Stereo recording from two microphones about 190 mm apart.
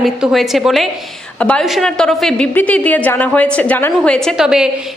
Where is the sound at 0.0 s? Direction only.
Centre (ahead or behind).